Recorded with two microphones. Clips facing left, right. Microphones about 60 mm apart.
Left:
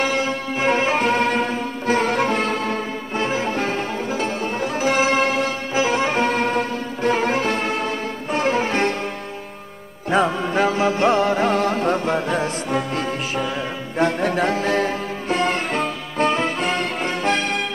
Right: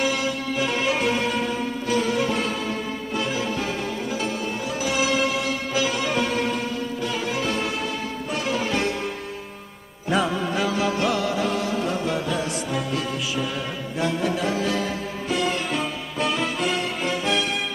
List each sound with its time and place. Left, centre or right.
0.0 s music: left
3.2 s music: left
4.7 s music: left
10.1 s music: left